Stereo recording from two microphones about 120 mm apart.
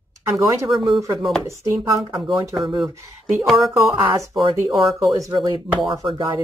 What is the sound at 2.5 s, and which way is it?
Speech, centre (ahead or behind).